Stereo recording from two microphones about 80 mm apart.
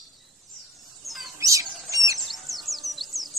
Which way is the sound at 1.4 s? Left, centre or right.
Right.